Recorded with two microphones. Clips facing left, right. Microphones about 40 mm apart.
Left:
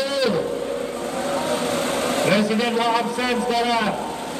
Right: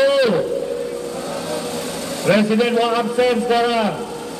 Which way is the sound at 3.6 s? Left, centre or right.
Centre.